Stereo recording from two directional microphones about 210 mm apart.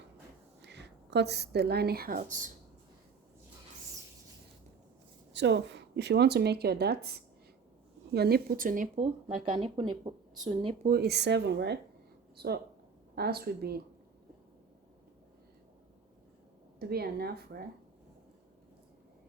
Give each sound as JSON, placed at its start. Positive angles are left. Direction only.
{"t": 0.6, "sound": "a woman's voice", "side_deg": -55}
{"t": 5.3, "sound": "speech", "side_deg": -55}
{"t": 10.8, "sound": "speech", "side_deg": -50}
{"t": 13.1, "sound": "speech", "side_deg": -50}
{"t": 16.8, "sound": "speech", "side_deg": -50}